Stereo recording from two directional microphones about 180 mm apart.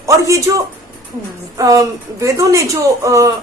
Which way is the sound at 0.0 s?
15° right (ahead or behind).